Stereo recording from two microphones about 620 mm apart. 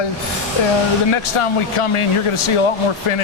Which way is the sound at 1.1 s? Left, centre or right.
Left.